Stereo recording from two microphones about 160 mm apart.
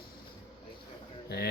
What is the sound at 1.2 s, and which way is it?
Speech, 85° left.